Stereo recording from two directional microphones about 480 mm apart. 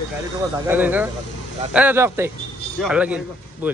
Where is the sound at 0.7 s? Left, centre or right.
Centre.